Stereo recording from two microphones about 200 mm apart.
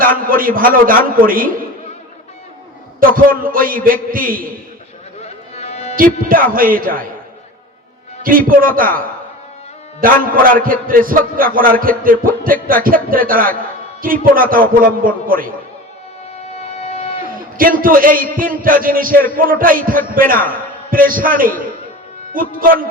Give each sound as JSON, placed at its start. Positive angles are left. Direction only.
{"t": 0.0, "sound": "a man's voice", "side_deg": -45}
{"t": 3.0, "sound": "a man's voice", "side_deg": -45}
{"t": 5.2, "sound": "music", "side_deg": 30}
{"t": 6.2, "sound": "a man's voice", "side_deg": -45}
{"t": 8.2, "sound": "a man's voice", "side_deg": -45}
{"t": 16.5, "sound": "music", "side_deg": 30}
{"t": 17.2, "sound": "a man's voice", "side_deg": -45}